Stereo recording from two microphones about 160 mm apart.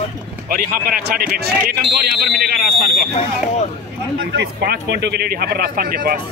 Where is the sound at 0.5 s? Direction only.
70° right (ahead or behind).